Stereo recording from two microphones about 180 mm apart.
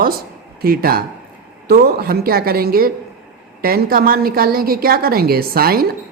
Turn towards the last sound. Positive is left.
turn(degrees=-55)  # may be behind; listen again after turning